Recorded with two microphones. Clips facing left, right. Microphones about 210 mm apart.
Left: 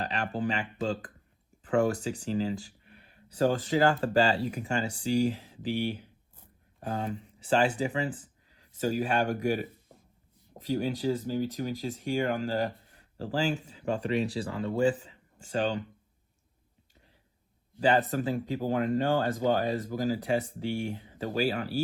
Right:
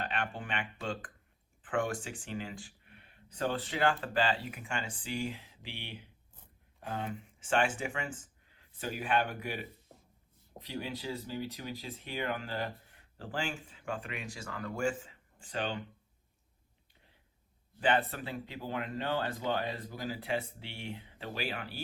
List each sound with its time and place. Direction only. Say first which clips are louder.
0.0 s speech: left 6 dB; 40° left (ahead or behind)
17.7 s speech: left 5 dB; 40° left (ahead or behind)